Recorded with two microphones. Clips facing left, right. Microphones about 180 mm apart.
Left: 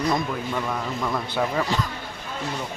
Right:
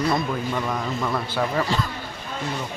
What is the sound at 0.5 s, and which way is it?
Speech, centre (ahead or behind).